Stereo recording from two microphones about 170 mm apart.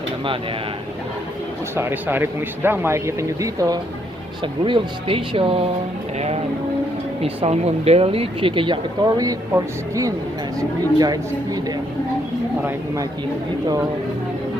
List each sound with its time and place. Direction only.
1.7 s speech: 10° right (ahead or behind)
4.6 s speech: 30° right (ahead or behind)